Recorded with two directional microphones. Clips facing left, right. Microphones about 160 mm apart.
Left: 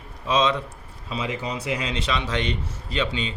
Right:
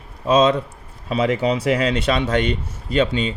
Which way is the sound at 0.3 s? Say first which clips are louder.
Right 6 dB; 45° right (ahead or behind).